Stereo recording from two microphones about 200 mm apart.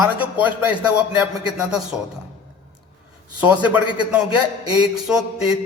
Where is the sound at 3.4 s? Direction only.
5° right (ahead or behind).